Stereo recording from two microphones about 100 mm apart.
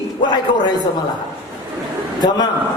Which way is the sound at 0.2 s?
45° left (ahead or behind).